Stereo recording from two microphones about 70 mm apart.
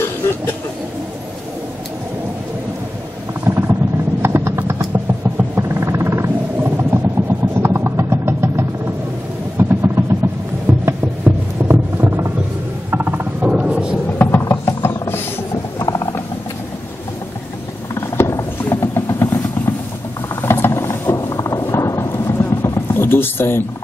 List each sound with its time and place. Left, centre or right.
3.4 s vehicle: right
10.7 s a sound: right
13.4 s thunder: centre
14.1 s music: left
14.7 s mechanisms: left
17.9 s vehicle: left
20.4 s mechanisms: left
21.4 s a sound: left
22.1 s a sound: left